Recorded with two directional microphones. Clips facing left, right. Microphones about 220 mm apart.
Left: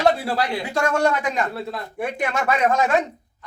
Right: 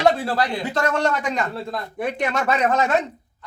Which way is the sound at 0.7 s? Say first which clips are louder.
Left 4 dB; 10° left (ahead or behind).